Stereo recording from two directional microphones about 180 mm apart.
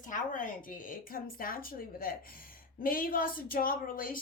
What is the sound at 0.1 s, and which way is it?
A woman's voice, 45° left (ahead or behind).